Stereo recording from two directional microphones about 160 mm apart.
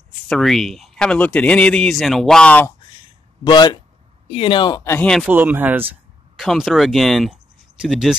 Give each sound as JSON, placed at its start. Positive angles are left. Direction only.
{"t": 0.3, "sound": "speech", "side_deg": 0}
{"t": 3.4, "sound": "speech", "side_deg": 30}
{"t": 5.0, "sound": "speech", "side_deg": 0}
{"t": 5.3, "sound": "speech", "side_deg": -10}
{"t": 6.3, "sound": "speech", "side_deg": 0}